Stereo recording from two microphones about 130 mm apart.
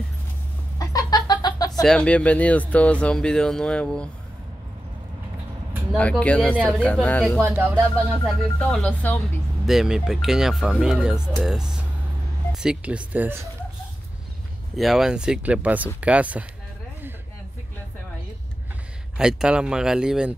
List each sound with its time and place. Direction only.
0.7 s a sound: 30° left (ahead or behind)
1.8 s speech: 5° left (ahead or behind)
5.9 s speech: 10° left (ahead or behind)
7.3 s speech: 15° right (ahead or behind)
7.9 s speech: 5° left (ahead or behind)
8.8 s speech: 15° left (ahead or behind)
9.7 s speech: 5° right (ahead or behind)
14.8 s speech: centre (ahead or behind)
19.1 s speech: 5° right (ahead or behind)